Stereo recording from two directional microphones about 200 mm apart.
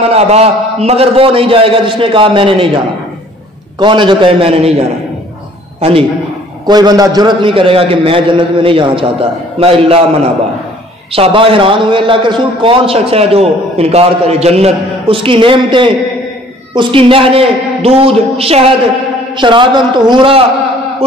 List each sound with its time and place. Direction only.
0.1 s a man's voice: 30° right (ahead or behind)
3.8 s a man's voice: 25° right (ahead or behind)
5.8 s a man's voice: 30° right (ahead or behind)
11.1 s a man's voice: 25° right (ahead or behind)